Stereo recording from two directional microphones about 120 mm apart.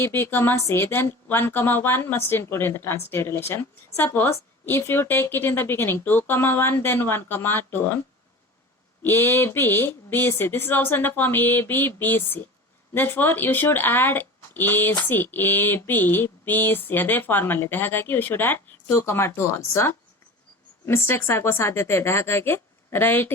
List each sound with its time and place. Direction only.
0.0 s speech: 20° left (ahead or behind)
9.0 s speech: 20° left (ahead or behind)